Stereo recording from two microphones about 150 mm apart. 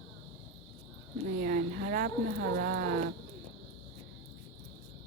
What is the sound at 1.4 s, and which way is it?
Speech, 65° right (ahead or behind).